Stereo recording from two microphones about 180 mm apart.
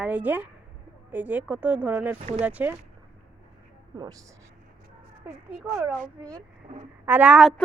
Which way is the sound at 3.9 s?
25° right (ahead or behind).